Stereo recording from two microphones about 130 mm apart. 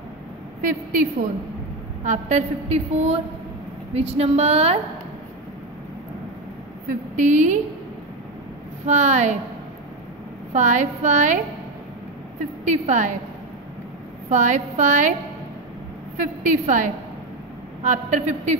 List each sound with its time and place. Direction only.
0.6 s a woman's voice: 90° right
2.0 s a woman's voice: 65° right (ahead or behind)
6.9 s a woman's voice: 70° right (ahead or behind)
8.8 s a woman's voice: 65° right (ahead or behind)
10.5 s a woman's voice: 65° right (ahead or behind)
12.6 s a woman's voice: 65° right (ahead or behind)
14.3 s a woman's voice: 70° right (ahead or behind)
16.2 s a woman's voice: 80° right
17.8 s a woman's voice: 70° right (ahead or behind)